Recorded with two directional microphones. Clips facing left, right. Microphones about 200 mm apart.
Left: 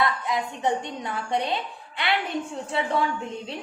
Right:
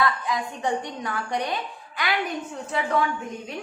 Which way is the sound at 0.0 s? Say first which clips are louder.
Even; 25° left (ahead or behind).